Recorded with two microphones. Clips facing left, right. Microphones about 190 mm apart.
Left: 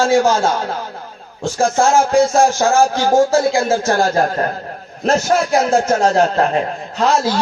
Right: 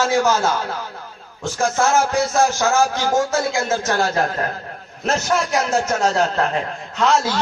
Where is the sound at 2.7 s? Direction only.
30° left (ahead or behind).